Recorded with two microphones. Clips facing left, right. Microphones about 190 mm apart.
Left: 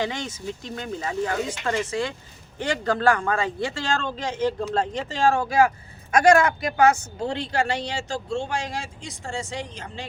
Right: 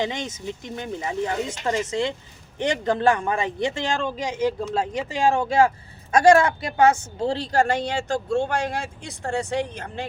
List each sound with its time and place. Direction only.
0.0 s speech: 20° right (ahead or behind); by 10.1 s 55° right (ahead or behind)